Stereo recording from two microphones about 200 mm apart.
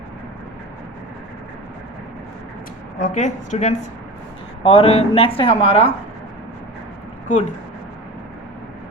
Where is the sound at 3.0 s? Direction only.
35° left (ahead or behind).